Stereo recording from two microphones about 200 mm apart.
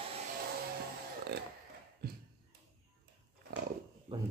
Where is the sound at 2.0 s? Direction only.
50° right (ahead or behind).